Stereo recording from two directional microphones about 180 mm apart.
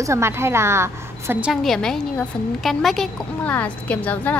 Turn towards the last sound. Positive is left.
turn(degrees=10)  # may be behind; listen again after turning